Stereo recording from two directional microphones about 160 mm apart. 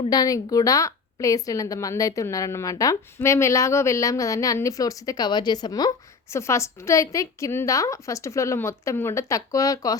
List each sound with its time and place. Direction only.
0.1 s a woman's voice: 25° left (ahead or behind)